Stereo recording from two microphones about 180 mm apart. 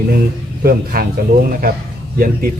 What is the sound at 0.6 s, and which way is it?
Speech, 60° right (ahead or behind).